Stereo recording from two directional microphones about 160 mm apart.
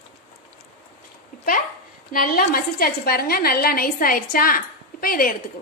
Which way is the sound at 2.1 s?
65° left (ahead or behind).